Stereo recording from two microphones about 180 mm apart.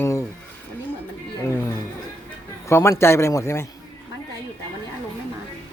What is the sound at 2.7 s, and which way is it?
Speech, 15° left (ahead or behind).